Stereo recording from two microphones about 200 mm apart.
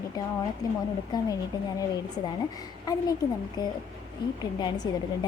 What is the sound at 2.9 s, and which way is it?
A woman's voice, 20° left (ahead or behind).